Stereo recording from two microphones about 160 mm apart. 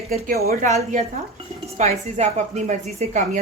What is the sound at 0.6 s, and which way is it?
Speech, 45° right (ahead or behind).